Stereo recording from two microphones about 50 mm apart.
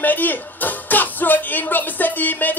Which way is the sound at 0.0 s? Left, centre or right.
Left.